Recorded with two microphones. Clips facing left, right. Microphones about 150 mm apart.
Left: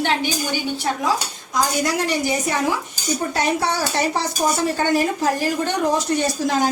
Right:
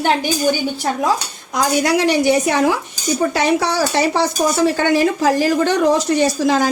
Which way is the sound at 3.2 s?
90° right.